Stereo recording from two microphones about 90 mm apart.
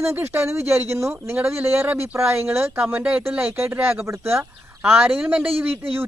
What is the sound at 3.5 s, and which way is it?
Speech, 25° right (ahead or behind).